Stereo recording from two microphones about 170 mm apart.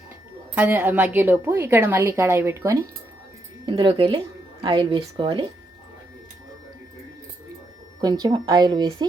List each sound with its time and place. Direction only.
0.5 s a woman's voice: 10° right (ahead or behind)
3.7 s a woman's voice: 30° right (ahead or behind)
8.0 s a woman's voice: 25° right (ahead or behind)